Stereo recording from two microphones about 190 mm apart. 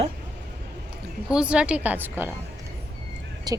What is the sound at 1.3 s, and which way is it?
A woman's voice, 5° right (ahead or behind).